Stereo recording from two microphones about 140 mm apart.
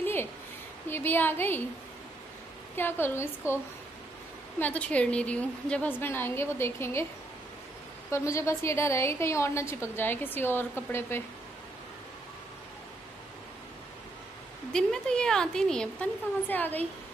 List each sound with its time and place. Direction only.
0.0 s a sound: 15° left (ahead or behind)
0.8 s a woman's voice: 15° left (ahead or behind)
2.7 s a woman's voice: 15° left (ahead or behind)
4.6 s a woman's voice: 10° left (ahead or behind)
8.1 s a woman's voice: 20° left (ahead or behind)
14.7 s a woman's voice: 5° left (ahead or behind)